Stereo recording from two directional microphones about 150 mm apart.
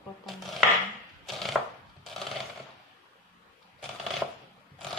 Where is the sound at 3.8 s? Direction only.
Centre (ahead or behind).